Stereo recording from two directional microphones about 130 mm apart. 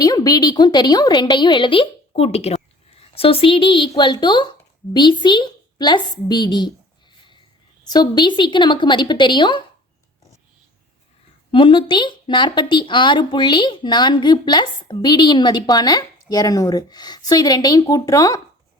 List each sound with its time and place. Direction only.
0.0 s speech: 30° left (ahead or behind)
7.9 s speech: 35° left (ahead or behind)
11.5 s speech: 40° left (ahead or behind)